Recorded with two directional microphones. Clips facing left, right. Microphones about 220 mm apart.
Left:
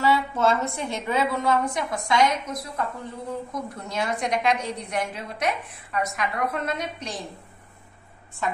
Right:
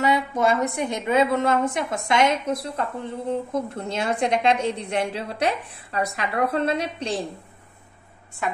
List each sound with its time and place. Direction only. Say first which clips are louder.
0.0 s a woman's voice: right 1 dB; 15° right (ahead or behind)